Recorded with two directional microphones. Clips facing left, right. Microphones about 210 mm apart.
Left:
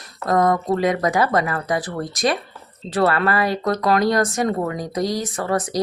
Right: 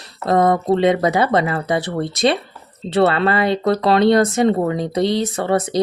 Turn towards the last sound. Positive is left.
turn(degrees=-25)  # may be behind; listen again after turning